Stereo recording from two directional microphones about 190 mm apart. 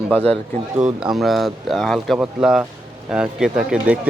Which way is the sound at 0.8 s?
5° right (ahead or behind).